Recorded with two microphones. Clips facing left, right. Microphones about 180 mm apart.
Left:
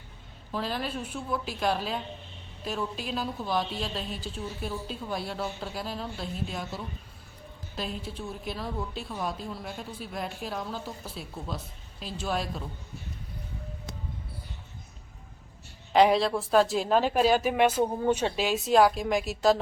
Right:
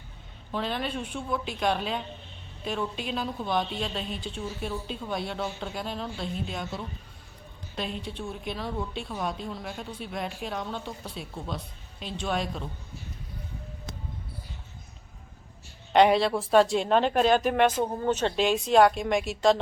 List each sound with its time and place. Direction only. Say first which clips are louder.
0.5 s a woman's voice: right 1 dB; centre (ahead or behind)
15.9 s a woman's voice: right 1 dB; centre (ahead or behind)